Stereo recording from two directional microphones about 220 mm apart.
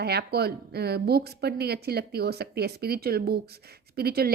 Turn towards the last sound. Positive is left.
turn(degrees=-45)  # may be behind; listen again after turning